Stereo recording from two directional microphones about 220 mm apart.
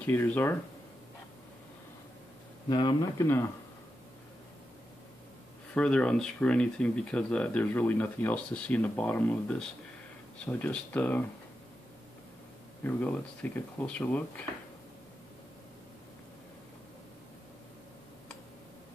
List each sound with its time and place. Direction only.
0.0 s speech: 10° left (ahead or behind)
2.7 s speech: 20° left (ahead or behind)
5.8 s speech: 5° left (ahead or behind)
12.8 s speech: 5° left (ahead or behind)